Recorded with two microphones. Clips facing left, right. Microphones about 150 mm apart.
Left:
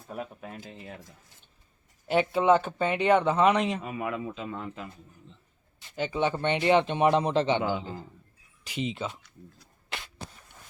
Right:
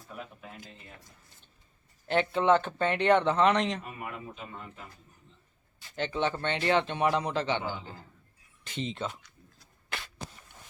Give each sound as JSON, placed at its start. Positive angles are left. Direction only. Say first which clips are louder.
{"t": 0.1, "sound": "speech", "louder": "left 6 dB", "side_deg": 45}
{"t": 2.0, "sound": "speech", "louder": "left 2 dB", "side_deg": 10}
{"t": 3.8, "sound": "speech", "louder": "left 8 dB", "side_deg": 90}
{"t": 6.0, "sound": "speech", "louder": "left 3 dB", "side_deg": 10}
{"t": 8.6, "sound": "speech", "louder": "left 2 dB", "side_deg": 10}